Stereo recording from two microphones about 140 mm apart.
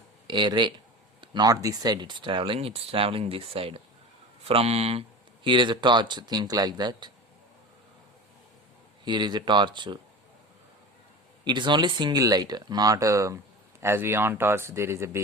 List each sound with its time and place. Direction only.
0.3 s speech: 35° right (ahead or behind)
9.0 s speech: 30° right (ahead or behind)
11.4 s speech: 35° right (ahead or behind)